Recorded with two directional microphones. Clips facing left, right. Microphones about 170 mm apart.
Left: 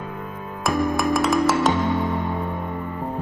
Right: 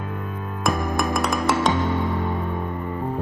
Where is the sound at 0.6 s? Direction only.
Centre (ahead or behind).